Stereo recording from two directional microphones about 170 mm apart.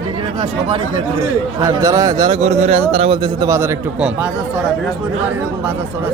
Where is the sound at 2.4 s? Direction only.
40° right (ahead or behind); by 3.7 s 15° right (ahead or behind).